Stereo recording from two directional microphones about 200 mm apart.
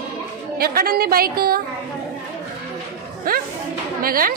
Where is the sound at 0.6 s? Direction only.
50° right (ahead or behind).